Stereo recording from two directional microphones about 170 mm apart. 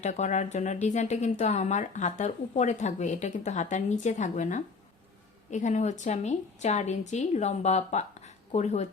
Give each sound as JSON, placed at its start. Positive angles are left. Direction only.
{"t": 0.0, "sound": "a woman's voice", "side_deg": 45}